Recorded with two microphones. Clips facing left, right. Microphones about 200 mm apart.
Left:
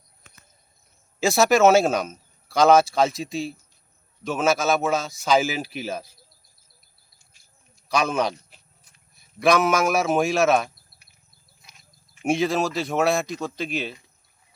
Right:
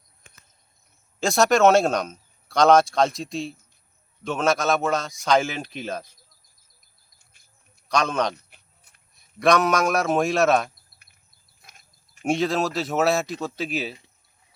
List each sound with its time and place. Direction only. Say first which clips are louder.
1.2 s speech: left 1 dB; 5° left (ahead or behind)
7.9 s a man's voice: even; 5° left (ahead or behind)
8.4 s sheep: left 2 dB; 60° right (ahead or behind)
9.1 s speech: even; 5° left (ahead or behind)
11.6 s goat: right 2 dB; 50° right (ahead or behind)
12.2 s speech: left 1 dB; centre (ahead or behind)